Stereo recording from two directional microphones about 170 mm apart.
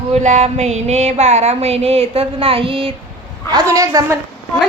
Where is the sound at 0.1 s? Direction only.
45° right (ahead or behind).